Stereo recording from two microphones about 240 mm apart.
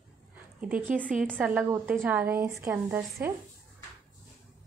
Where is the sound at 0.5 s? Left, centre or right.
Centre.